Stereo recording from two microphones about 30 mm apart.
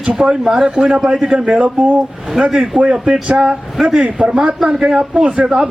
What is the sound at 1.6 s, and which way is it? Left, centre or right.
Speech, right.